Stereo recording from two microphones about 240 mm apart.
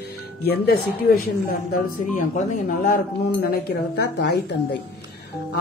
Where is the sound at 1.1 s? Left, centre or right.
Left.